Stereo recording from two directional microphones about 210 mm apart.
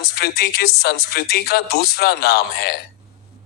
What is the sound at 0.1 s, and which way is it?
A man's voice, 50° left (ahead or behind).